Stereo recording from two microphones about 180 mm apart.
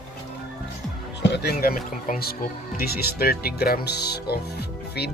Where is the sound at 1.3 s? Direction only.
60° left (ahead or behind).